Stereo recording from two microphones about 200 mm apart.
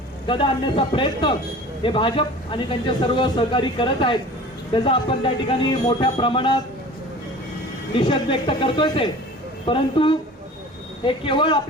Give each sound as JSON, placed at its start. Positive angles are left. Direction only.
{"t": 0.3, "sound": "a man's voice", "side_deg": 25}
{"t": 7.9, "sound": "a man's voice", "side_deg": 25}